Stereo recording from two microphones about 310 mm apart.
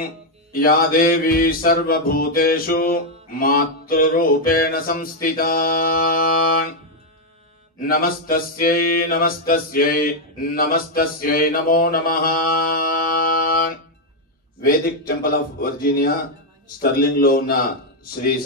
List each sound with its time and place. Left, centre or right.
0.0 s music: left
7.8 s music: left
9.5 s mantra: left
14.6 s music: left